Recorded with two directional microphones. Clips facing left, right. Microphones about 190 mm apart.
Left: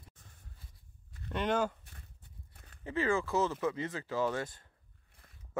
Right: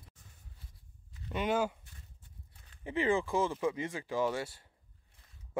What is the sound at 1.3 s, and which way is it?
Speech, 5° right (ahead or behind).